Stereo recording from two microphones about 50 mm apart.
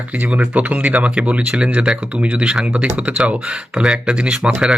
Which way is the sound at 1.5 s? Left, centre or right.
Centre.